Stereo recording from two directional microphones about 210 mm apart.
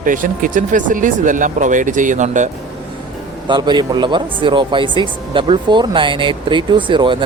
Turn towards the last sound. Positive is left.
turn(degrees=-25)  # may be behind; listen again after turning